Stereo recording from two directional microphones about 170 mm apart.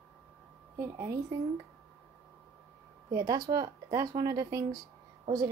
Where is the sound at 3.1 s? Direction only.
20° right (ahead or behind).